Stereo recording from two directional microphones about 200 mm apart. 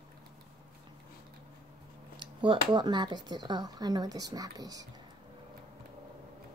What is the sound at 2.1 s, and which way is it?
Speech, 20° right (ahead or behind).